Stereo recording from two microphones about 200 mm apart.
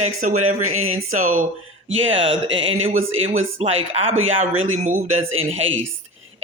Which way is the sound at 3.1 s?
85° right.